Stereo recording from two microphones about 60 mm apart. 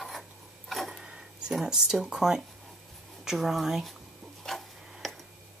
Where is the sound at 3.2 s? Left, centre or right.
Centre.